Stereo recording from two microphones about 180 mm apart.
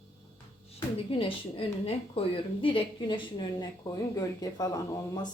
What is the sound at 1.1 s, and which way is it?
A woman's voice, 30° left (ahead or behind).